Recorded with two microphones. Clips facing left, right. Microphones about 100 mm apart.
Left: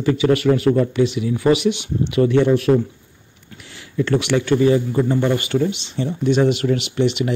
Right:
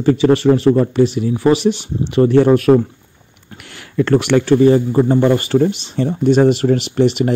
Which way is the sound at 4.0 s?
50° right (ahead or behind).